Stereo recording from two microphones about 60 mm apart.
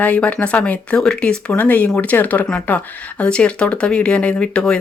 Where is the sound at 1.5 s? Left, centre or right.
Left.